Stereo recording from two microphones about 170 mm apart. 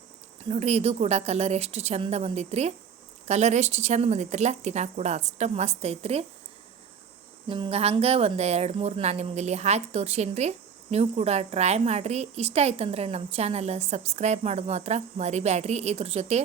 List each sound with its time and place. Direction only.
0.5 s a woman's voice: 40° right (ahead or behind)
7.4 s a woman's voice: 30° right (ahead or behind)